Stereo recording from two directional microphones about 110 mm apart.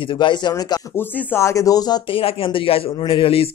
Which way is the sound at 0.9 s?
20° left (ahead or behind).